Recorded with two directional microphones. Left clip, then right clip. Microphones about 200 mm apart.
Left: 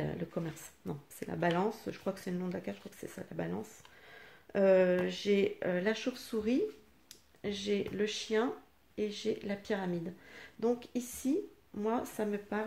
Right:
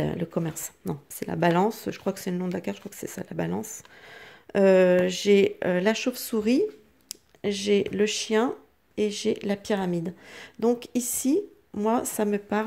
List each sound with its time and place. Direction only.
0.0 s speech: 40° right (ahead or behind)